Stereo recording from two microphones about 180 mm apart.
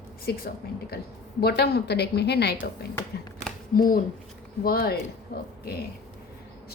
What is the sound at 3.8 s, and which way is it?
A woman's voice, 50° left (ahead or behind).